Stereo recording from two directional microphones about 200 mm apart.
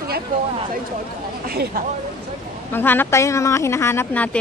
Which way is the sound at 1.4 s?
50° right (ahead or behind).